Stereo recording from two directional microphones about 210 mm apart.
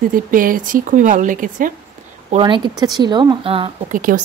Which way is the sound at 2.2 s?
25° right (ahead or behind).